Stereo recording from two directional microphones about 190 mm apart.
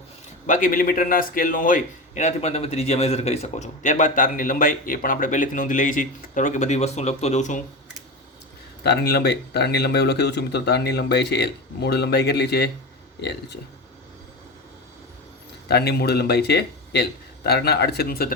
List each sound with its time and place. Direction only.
0.4 s a man's voice: 45° left (ahead or behind)
8.8 s speech: 60° left (ahead or behind)
15.7 s speech: 55° left (ahead or behind)